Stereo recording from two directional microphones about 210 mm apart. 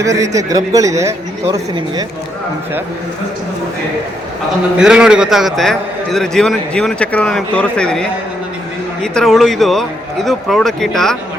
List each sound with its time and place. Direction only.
0.0 s speech: 15° right (ahead or behind)
4.8 s a man's voice: 5° right (ahead or behind)
9.1 s a man's voice: centre (ahead or behind)